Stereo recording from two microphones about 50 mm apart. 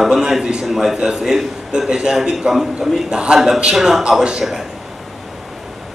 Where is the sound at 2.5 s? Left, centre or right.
Centre.